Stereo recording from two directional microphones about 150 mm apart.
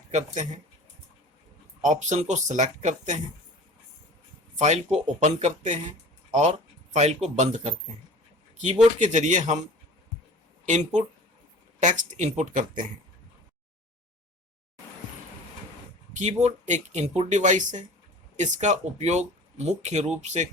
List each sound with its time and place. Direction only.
0.1 s speech: 55° right (ahead or behind)
1.8 s speech: 50° right (ahead or behind)
4.5 s speech: 50° right (ahead or behind)
10.7 s speech: 50° right (ahead or behind)
16.1 s speech: 45° right (ahead or behind)